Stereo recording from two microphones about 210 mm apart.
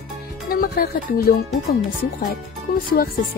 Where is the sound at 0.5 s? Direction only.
45° left (ahead or behind).